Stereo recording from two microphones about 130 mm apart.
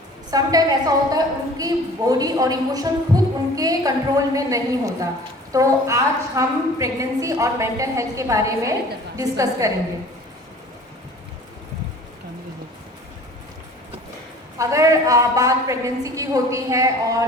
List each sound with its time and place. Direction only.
0.3 s a woman's voice: 30° right (ahead or behind)
14.6 s a woman's voice: 25° right (ahead or behind)